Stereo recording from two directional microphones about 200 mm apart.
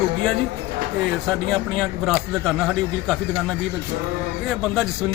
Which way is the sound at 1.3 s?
Centre (ahead or behind).